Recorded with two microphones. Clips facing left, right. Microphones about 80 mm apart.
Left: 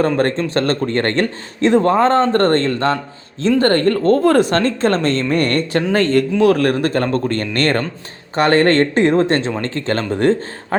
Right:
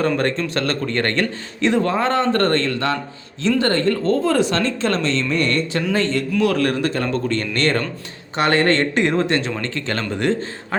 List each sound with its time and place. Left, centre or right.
0.2 s speech: left
3.6 s speech: left